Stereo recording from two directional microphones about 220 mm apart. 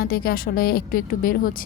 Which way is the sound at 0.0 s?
45° left (ahead or behind).